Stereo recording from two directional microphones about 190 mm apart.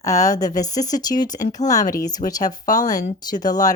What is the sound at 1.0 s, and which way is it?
Speech, 20° left (ahead or behind).